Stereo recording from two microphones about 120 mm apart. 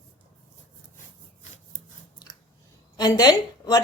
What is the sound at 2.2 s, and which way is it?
Chewing, 35° left (ahead or behind).